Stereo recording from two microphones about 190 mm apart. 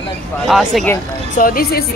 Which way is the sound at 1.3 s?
50° left (ahead or behind).